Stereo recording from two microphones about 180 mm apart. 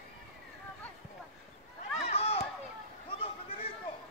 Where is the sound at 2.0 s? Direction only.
35° left (ahead or behind).